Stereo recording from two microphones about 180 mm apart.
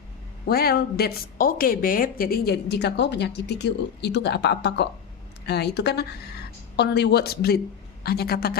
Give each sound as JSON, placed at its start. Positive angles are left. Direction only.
{"t": 0.4, "sound": "a woman's voice", "side_deg": 60}